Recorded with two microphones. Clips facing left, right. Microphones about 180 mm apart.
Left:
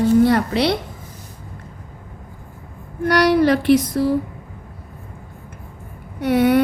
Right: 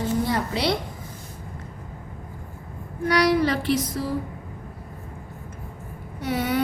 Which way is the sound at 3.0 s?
70° left (ahead or behind).